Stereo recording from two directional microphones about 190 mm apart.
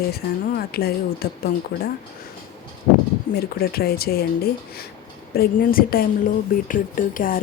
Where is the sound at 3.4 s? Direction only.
55° left (ahead or behind).